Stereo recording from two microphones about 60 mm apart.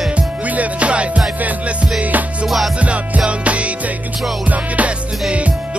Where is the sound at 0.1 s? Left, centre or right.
Right.